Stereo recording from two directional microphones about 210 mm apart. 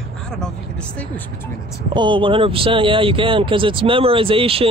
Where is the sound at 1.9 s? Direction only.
20° right (ahead or behind).